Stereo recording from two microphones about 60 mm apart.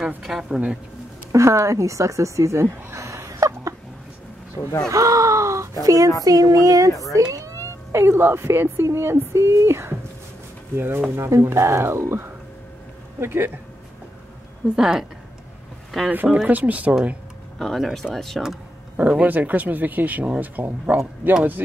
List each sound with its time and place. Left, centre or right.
0.2 s speech: centre
1.3 s speech: right
4.6 s speech: left
4.8 s speech: right
6.2 s a sound: right
6.9 s speech: left
7.3 s cat: right
8.5 s speech: right
14.8 s speech: centre
16.4 s speech: right
17.6 s speech: centre
18.9 s speech: right